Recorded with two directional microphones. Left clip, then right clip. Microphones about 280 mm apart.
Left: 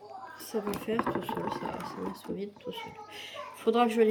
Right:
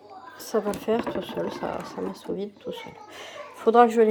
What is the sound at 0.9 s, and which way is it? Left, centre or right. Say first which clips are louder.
Speech: right 4 dB; centre.